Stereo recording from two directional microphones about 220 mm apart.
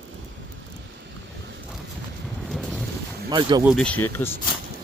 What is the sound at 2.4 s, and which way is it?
Vehicle, centre (ahead or behind).